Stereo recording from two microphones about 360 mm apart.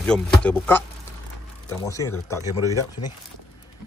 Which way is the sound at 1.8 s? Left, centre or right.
Centre.